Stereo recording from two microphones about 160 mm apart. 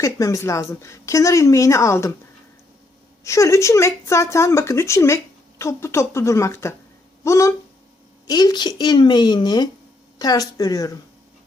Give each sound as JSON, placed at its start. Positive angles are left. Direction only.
{"t": 0.0, "sound": "speech", "side_deg": 20}
{"t": 3.2, "sound": "speech", "side_deg": 20}